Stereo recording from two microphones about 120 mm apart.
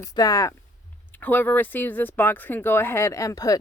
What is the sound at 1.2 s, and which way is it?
A woman's voice, 15° left (ahead or behind).